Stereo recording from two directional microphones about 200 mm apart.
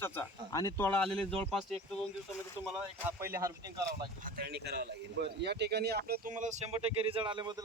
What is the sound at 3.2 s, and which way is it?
Speech, 15° right (ahead or behind).